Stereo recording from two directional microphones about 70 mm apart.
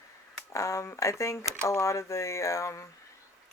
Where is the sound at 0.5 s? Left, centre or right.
Left.